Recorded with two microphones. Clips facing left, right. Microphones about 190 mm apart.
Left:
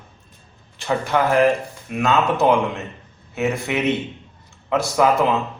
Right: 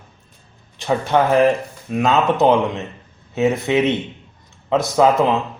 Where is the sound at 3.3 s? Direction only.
20° right (ahead or behind).